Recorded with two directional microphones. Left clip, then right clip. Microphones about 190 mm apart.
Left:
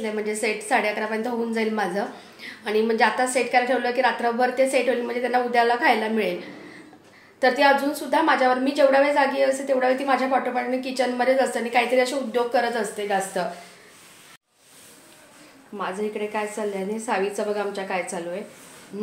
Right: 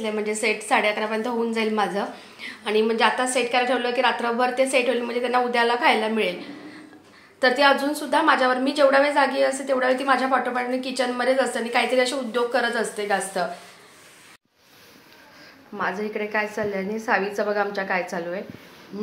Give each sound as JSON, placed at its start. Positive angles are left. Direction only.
{"t": 0.0, "sound": "a woman's voice", "side_deg": 10}
{"t": 7.3, "sound": "a woman's voice", "side_deg": 15}
{"t": 15.8, "sound": "a woman's voice", "side_deg": -5}